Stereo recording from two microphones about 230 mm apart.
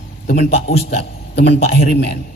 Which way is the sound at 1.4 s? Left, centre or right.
Left.